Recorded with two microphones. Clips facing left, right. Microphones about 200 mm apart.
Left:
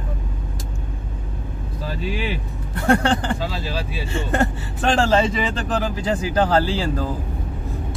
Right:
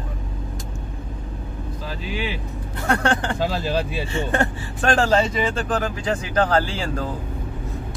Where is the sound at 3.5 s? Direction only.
45° right (ahead or behind).